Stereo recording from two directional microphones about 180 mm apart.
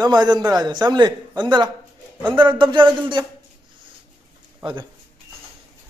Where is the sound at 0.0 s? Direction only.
25° right (ahead or behind).